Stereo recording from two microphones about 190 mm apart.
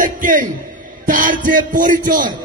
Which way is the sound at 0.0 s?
45° right (ahead or behind).